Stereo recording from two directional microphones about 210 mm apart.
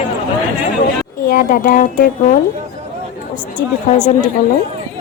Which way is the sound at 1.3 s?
40° left (ahead or behind).